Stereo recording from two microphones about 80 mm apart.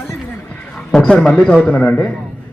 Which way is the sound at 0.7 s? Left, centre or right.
Centre.